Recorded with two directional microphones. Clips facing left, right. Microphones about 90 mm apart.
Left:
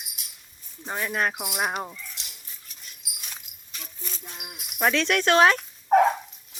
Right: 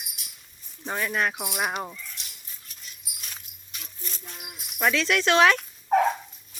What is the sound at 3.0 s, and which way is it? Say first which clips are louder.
Dog: left 3 dB; 90° left.